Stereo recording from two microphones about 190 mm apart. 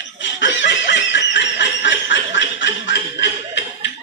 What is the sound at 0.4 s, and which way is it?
Snicker, 70° left (ahead or behind).